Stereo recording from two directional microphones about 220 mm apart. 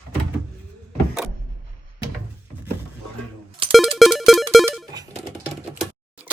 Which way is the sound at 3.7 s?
Centre (ahead or behind).